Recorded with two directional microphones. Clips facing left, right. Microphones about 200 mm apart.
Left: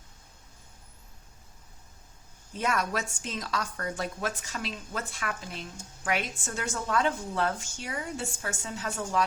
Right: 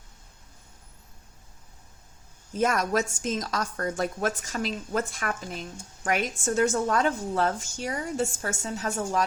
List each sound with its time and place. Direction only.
2.6 s a woman's voice: 45° right (ahead or behind)